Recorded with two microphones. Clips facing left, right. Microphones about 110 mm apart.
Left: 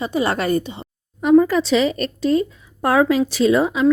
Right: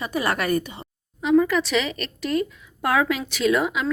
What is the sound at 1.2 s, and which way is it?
Speech, 50° left (ahead or behind).